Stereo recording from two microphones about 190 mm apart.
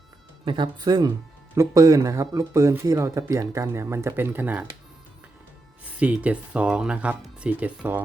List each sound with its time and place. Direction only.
0.4 s speech: 25° right (ahead or behind)
6.0 s speech: 5° right (ahead or behind)